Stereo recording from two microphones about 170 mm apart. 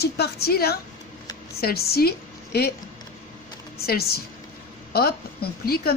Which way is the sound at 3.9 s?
65° left (ahead or behind).